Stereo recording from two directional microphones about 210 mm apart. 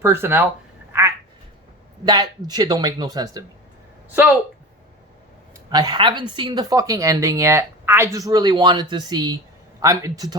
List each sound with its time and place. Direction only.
0.0 s speech: 10° right (ahead or behind)
2.0 s a woman's voice: 20° right (ahead or behind)
5.7 s a woman's voice: 20° right (ahead or behind)